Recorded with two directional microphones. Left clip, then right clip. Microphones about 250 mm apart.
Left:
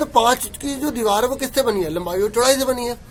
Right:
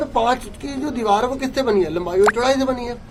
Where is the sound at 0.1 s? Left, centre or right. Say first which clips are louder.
Left 4 dB; left.